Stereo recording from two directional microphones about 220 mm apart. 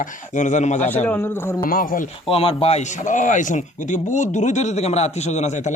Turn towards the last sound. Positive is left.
turn(degrees=30)  # may be behind; listen again after turning